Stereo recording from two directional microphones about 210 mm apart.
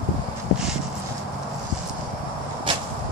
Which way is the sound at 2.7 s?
25° right (ahead or behind).